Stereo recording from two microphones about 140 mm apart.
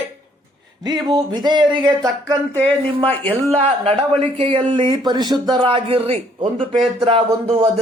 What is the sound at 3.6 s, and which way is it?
A man's voice, 45° right (ahead or behind).